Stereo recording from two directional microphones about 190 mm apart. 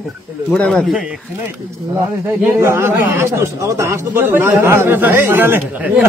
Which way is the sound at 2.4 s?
15° right (ahead or behind).